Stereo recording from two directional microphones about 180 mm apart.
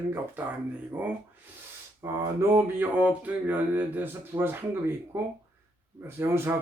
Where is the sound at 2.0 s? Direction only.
15° right (ahead or behind).